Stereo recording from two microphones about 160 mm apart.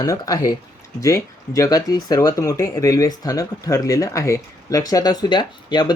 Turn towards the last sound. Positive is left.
turn(degrees=30)  # may be behind; listen again after turning